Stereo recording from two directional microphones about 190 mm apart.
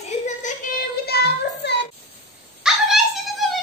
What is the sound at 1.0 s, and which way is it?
Child singing, 60° left (ahead or behind).